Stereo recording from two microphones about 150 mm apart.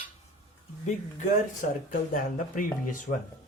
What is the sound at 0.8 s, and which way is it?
Speech, 55° left (ahead or behind).